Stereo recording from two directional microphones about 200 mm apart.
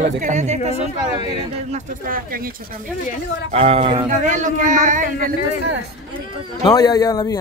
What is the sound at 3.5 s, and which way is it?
Speech, 30° right (ahead or behind).